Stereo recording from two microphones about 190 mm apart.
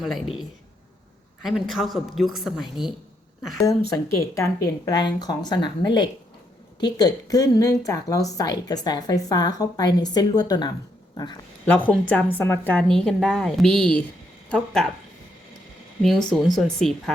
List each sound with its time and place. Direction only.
0.0 s a woman's voice: centre (ahead or behind)
3.6 s a woman's voice: 15° left (ahead or behind)
11.6 s a woman's voice: 5° left (ahead or behind)
16.0 s a woman's voice: centre (ahead or behind)